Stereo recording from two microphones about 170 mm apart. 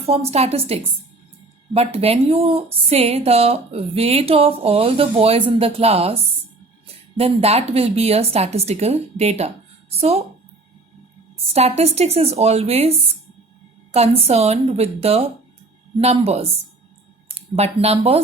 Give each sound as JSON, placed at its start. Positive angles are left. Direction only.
{"t": 0.0, "sound": "a woman's voice", "side_deg": -35}
{"t": 11.5, "sound": "a woman's voice", "side_deg": -40}